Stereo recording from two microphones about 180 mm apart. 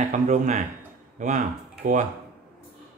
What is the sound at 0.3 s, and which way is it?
Speech, 40° right (ahead or behind).